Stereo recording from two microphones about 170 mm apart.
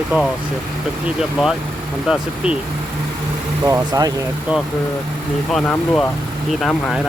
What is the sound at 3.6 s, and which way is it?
Speech, 20° right (ahead or behind).